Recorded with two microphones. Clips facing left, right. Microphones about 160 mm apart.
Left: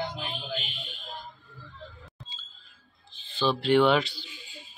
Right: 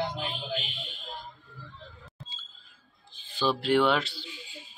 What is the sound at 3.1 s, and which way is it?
Speech, 10° right (ahead or behind).